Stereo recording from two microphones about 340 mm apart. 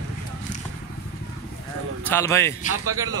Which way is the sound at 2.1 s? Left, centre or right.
Centre.